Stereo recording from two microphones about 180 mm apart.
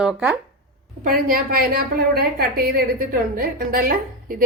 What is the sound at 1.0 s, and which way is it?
A woman's voice, 50° right (ahead or behind).